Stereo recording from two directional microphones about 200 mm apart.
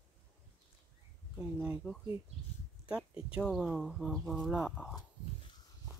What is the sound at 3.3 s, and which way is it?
Speech, centre (ahead or behind).